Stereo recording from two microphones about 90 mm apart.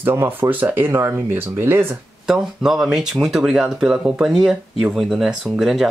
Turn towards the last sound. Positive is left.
turn(degrees=-5)  # may be behind; listen again after turning